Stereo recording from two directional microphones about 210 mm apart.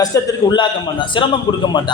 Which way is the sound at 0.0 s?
15° left (ahead or behind).